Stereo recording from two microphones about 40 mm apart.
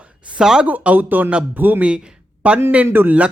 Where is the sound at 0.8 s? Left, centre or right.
Right.